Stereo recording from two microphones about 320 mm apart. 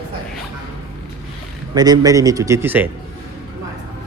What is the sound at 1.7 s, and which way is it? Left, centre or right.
A man's voice, centre.